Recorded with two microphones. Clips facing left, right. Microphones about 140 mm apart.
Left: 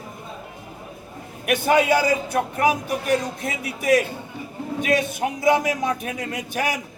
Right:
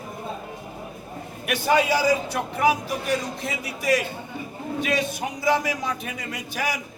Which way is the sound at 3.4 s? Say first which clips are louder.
Left 2 dB; 55° left (ahead or behind).